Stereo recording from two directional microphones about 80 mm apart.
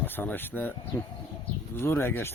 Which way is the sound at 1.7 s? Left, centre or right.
Left.